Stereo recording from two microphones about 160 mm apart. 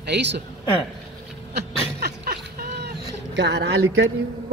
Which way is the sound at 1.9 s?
80° right.